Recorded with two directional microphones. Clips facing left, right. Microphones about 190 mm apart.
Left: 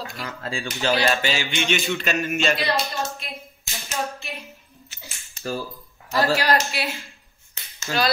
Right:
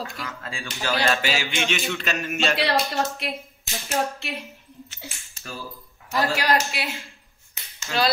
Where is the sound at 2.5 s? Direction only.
70° right (ahead or behind).